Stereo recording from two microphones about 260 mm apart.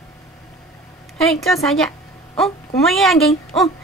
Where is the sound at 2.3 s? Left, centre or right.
Centre.